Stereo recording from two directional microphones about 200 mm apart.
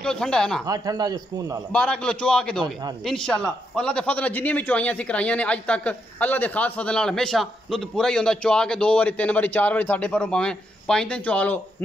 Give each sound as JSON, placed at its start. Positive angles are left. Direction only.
{"t": 0.0, "sound": "a man's voice", "side_deg": 5}
{"t": 0.7, "sound": "a man's voice", "side_deg": -20}
{"t": 1.7, "sound": "a man's voice", "side_deg": 5}